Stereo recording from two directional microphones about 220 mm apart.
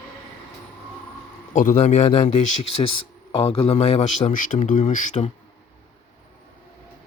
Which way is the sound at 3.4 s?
25° left (ahead or behind).